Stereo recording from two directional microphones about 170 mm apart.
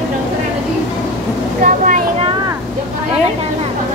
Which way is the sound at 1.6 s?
50° right (ahead or behind).